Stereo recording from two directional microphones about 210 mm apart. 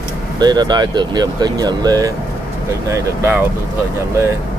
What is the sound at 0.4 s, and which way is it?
Speech, 20° right (ahead or behind).